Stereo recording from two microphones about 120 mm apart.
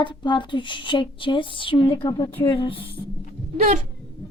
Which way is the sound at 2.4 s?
45° left (ahead or behind).